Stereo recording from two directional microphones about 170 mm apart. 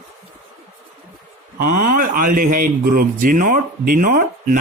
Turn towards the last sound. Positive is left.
turn(degrees=-55)  # may be behind; listen again after turning